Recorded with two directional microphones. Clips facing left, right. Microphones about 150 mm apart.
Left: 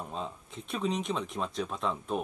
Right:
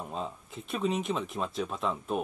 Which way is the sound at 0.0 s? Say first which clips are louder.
Right 1 dB; 5° right (ahead or behind).